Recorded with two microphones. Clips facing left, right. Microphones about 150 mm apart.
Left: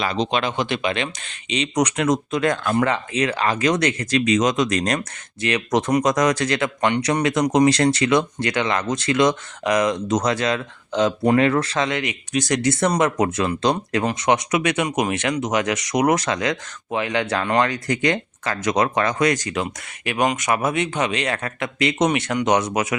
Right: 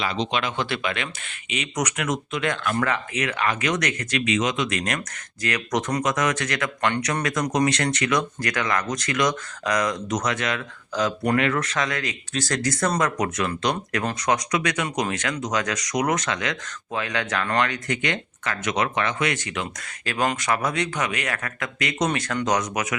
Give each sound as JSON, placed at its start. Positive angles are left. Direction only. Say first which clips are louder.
{"t": 0.0, "sound": "speech", "louder": "left 4 dB", "side_deg": 40}
{"t": 0.5, "sound": "speech", "louder": "left 4 dB", "side_deg": 20}
{"t": 2.7, "sound": "speech", "louder": "left 5 dB", "side_deg": 25}
{"t": 5.4, "sound": "speech", "louder": "left 5 dB", "side_deg": 25}
{"t": 20.1, "sound": "speech", "louder": "left 3 dB", "side_deg": 20}